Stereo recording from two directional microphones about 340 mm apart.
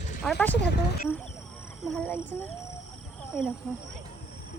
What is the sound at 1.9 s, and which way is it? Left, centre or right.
Speech, centre.